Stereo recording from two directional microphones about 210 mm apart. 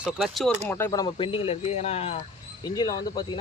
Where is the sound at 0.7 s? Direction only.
15° left (ahead or behind).